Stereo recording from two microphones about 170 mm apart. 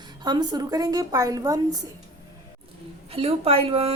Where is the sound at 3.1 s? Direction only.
35° right (ahead or behind).